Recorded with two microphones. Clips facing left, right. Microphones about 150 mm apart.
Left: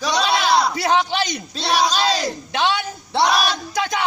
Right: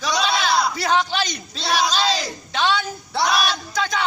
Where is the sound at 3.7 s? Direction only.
15° left (ahead or behind).